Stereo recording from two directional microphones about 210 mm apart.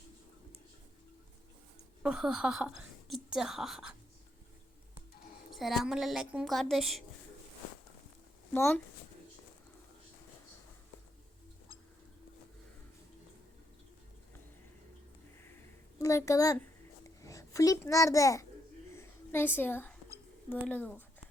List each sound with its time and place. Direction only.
2.0 s a woman's voice: 5° right (ahead or behind)
5.5 s a woman's voice: centre (ahead or behind)
8.5 s speech: 10° left (ahead or behind)
16.0 s a child's voice: 15° left (ahead or behind)
18.9 s a sound: 10° left (ahead or behind)
20.7 s speech: 5° left (ahead or behind)